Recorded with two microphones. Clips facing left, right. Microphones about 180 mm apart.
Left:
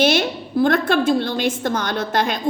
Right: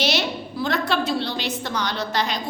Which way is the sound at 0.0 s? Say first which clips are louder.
Left 6 dB; 50° left (ahead or behind).